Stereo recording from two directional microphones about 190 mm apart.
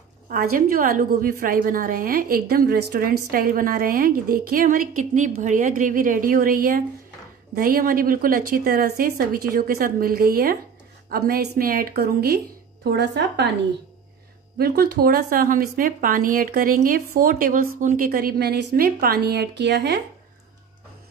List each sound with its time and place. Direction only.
0.3 s a woman's voice: 50° right (ahead or behind); by 13.5 s 65° right (ahead or behind)
14.6 s a woman's voice: 55° right (ahead or behind)